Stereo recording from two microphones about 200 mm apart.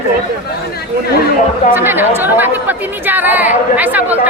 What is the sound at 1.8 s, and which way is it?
A woman's voice, 10° right (ahead or behind).